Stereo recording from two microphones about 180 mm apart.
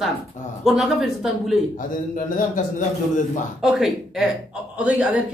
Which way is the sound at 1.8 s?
50° left (ahead or behind).